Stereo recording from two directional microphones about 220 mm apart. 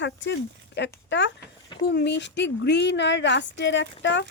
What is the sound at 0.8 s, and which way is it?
Speech, 55° left (ahead or behind).